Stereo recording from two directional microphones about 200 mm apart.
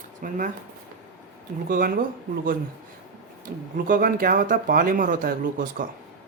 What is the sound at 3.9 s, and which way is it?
Speech, 45° right (ahead or behind).